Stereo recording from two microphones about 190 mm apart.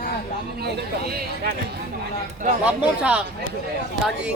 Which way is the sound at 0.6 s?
55° right (ahead or behind).